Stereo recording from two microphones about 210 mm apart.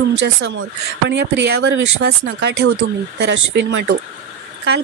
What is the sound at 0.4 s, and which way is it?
A woman's voice, 60° right (ahead or behind).